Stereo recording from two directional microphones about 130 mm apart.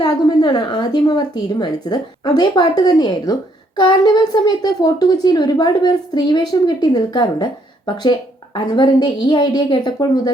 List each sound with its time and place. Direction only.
0.0 s a woman's voice: 35° left (ahead or behind)